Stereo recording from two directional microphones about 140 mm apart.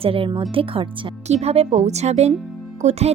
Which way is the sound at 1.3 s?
50° right (ahead or behind).